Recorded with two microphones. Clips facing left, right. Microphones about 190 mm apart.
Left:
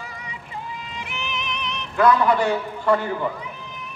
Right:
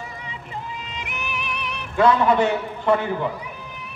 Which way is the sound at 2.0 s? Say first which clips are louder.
Right 1 dB; 25° right (ahead or behind).